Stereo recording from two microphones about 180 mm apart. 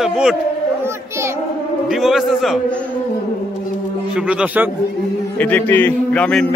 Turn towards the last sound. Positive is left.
turn(degrees=5)  # may be behind; listen again after turning